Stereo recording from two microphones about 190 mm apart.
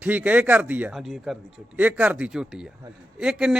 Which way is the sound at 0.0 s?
10° right (ahead or behind).